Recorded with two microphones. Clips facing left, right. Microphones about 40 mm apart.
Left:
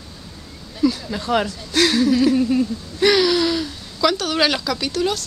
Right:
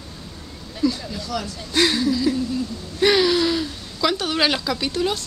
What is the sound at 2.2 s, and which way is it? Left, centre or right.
Speech, left.